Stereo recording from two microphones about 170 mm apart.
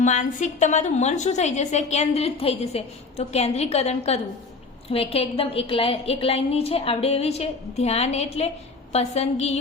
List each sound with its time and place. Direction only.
0.0 s a woman's voice: 45° left (ahead or behind)